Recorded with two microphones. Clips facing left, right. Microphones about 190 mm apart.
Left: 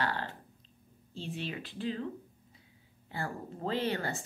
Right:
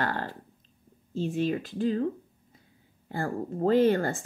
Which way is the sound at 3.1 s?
45° right (ahead or behind).